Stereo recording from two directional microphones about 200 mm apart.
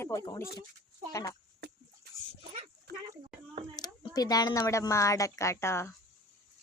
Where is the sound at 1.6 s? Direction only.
55° right (ahead or behind).